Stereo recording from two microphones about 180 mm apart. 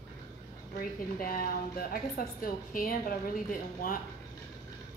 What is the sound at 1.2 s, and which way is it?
A woman's voice, 55° left (ahead or behind).